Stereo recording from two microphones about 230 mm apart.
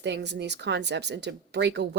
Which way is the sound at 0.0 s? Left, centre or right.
Right.